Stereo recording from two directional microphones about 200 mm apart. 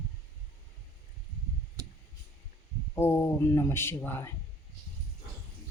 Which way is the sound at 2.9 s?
10° left (ahead or behind).